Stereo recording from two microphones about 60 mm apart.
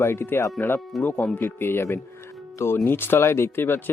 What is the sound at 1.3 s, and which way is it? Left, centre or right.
Speech, left.